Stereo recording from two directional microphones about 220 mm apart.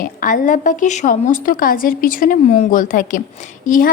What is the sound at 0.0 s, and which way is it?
A woman's voice, 40° left (ahead or behind).